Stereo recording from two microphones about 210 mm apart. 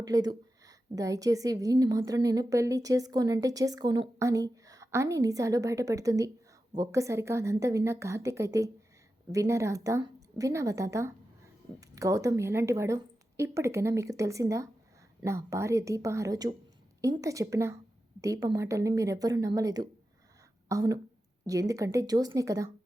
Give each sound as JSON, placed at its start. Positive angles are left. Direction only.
{"t": 0.0, "sound": "a woman's voice", "side_deg": -15}